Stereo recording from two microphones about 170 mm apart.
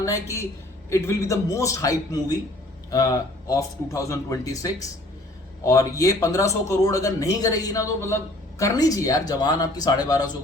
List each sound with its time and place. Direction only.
0.0 s a man's voice: 20° left (ahead or behind)